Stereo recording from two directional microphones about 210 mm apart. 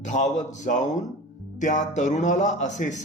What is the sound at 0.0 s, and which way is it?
Speech, 35° left (ahead or behind).